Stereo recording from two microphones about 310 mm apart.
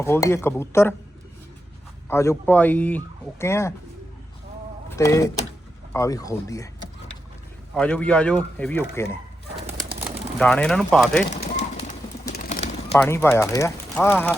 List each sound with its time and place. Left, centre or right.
0.0 s speech: centre
2.0 s speech: centre
4.9 s speech: centre
7.7 s speech: centre
11.3 s bird: left
12.9 s speech: centre